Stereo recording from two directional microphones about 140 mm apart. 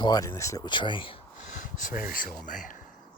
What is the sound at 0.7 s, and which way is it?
Speech, 35° left (ahead or behind).